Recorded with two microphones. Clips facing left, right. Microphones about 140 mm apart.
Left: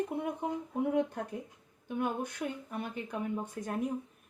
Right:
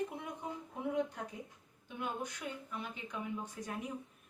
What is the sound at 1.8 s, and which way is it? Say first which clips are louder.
A woman's voice: left 7 dB; 50° left (ahead or behind).